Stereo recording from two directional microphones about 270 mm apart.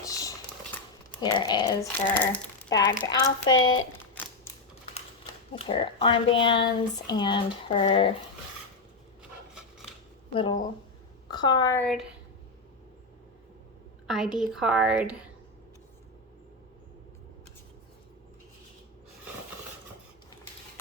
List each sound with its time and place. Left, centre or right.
0.0 s typewriter: centre
1.2 s speech: centre
3.6 s speech: left
4.9 s a sound: left
6.3 s speech: centre
10.3 s speech: centre
14.1 s a woman's voice: centre